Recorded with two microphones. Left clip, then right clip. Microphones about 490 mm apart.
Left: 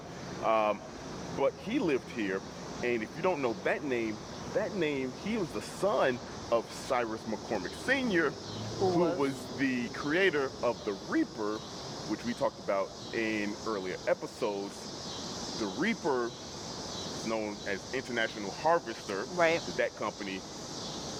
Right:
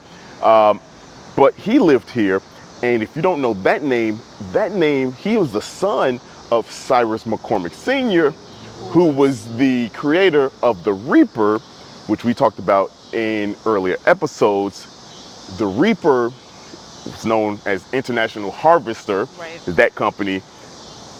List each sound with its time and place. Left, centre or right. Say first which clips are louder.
0.4 s speech: right 17 dB; right
1.4 s speech: right 18 dB; right
15.6 s speech: right 17 dB; right
17.2 s speech: right 18 dB; right
19.4 s speech: left 5 dB; left
19.7 s speech: right 17 dB; right